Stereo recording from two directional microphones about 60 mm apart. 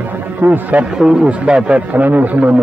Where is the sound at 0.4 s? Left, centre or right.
Right.